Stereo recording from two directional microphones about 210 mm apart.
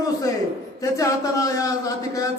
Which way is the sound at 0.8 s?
15° left (ahead or behind).